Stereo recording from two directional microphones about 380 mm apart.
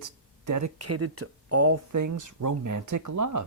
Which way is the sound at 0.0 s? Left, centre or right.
Right.